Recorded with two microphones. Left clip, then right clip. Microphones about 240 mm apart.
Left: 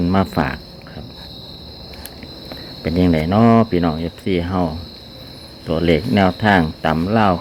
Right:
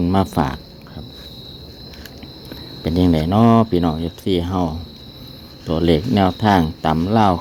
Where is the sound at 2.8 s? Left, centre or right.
Right.